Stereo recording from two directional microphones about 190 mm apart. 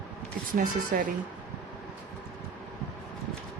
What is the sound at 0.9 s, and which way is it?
Speech, 50° right (ahead or behind).